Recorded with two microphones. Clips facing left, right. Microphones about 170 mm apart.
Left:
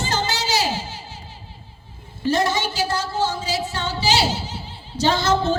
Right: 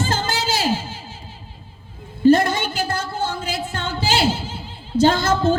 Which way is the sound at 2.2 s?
55° right (ahead or behind).